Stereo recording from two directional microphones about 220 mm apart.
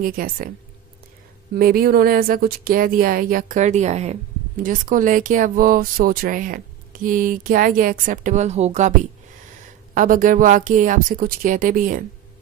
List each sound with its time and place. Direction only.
0.0 s speech: 40° right (ahead or behind)
1.5 s speech: 40° right (ahead or behind)
9.9 s speech: 35° right (ahead or behind)